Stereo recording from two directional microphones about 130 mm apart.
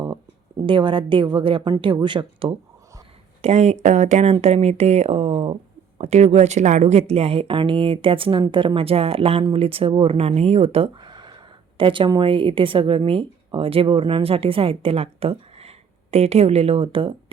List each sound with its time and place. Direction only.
0.6 s a woman's voice: 40° right (ahead or behind)
3.4 s speech: 60° right (ahead or behind)
6.0 s speech: 60° right (ahead or behind)